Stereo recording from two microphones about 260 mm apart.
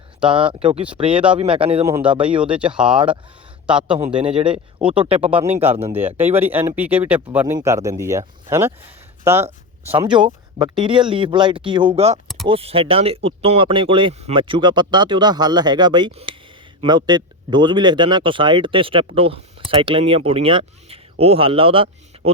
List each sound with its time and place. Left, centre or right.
0.3 s speech: centre
1.1 s speech: centre
1.4 s speech: right
2.2 s speech: centre
3.9 s speech: centre
5.9 s speech: centre
22.1 s a sound: right